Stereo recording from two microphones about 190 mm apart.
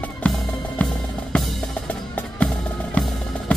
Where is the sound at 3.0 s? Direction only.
5° left (ahead or behind).